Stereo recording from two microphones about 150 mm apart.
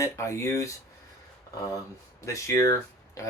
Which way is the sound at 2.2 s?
20° left (ahead or behind).